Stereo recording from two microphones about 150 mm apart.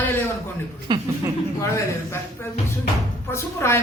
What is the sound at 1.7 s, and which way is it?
A woman's voice, 15° left (ahead or behind).